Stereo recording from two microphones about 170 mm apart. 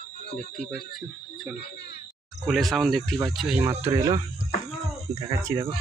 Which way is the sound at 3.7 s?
15° right (ahead or behind).